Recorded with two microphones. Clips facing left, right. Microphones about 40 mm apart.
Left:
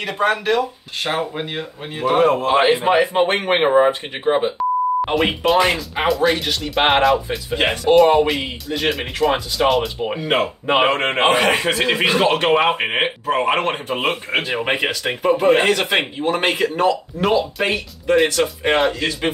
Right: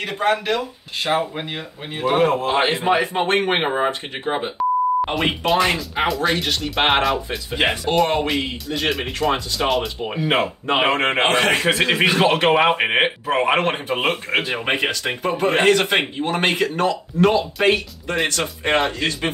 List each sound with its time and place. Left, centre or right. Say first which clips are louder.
0.6 s speech: left 4 dB; centre
2.1 s speech: left 3 dB; centre
2.8 s speech: left 3 dB; centre
3.2 s speech: left 2 dB; centre